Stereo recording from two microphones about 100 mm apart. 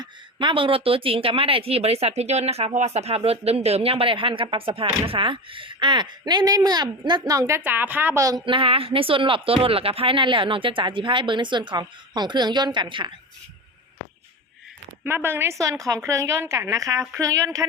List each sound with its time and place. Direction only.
0.0 s a woman's voice: 55° right (ahead or behind)
7.3 s a woman's voice: 30° right (ahead or behind)
8.4 s a woman's voice: 60° right (ahead or behind)
15.0 s a woman's voice: 25° right (ahead or behind)